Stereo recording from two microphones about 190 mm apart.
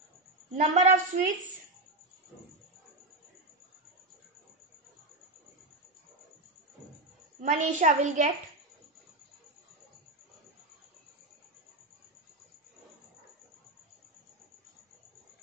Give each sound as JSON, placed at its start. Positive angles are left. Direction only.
{"t": 0.6, "sound": "a woman's voice", "side_deg": -40}
{"t": 7.4, "sound": "a woman's voice", "side_deg": -40}